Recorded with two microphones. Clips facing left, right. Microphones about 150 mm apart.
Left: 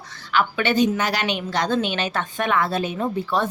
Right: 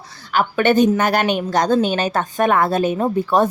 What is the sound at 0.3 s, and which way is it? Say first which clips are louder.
A woman's voice: right 5 dB; 45° right (ahead or behind).